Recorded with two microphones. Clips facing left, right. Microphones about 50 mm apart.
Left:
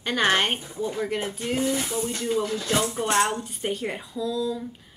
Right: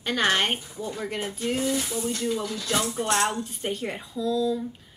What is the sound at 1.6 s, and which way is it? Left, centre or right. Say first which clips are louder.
Speech: left 4 dB; left.